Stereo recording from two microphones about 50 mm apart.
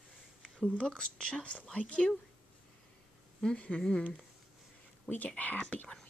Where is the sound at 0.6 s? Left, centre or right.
Left.